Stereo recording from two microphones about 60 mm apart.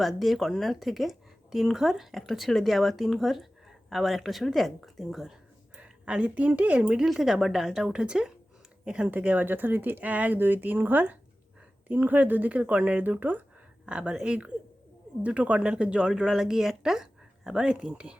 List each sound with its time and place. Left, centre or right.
0.0 s speech: centre
5.7 s speech: centre
7.1 s a woman's voice: centre
9.0 s speech: right
13.8 s a woman's voice: centre